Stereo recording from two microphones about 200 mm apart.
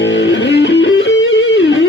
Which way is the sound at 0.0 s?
65° left (ahead or behind).